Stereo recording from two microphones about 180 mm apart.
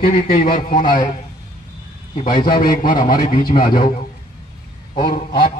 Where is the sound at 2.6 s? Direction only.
50° left (ahead or behind).